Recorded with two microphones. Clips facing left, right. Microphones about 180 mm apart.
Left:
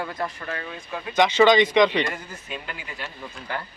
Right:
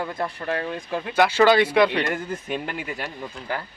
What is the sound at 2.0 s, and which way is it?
Speech, 50° right (ahead or behind).